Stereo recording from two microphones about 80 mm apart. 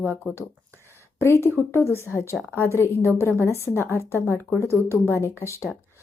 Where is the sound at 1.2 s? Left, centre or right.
Left.